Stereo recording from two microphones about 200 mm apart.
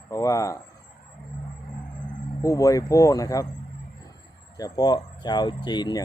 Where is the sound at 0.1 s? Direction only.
15° left (ahead or behind).